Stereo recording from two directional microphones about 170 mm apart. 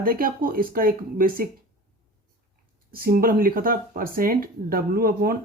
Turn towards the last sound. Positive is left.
turn(degrees=-60)  # may be behind; listen again after turning